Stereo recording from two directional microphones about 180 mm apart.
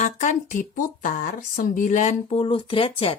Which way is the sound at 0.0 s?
40° left (ahead or behind).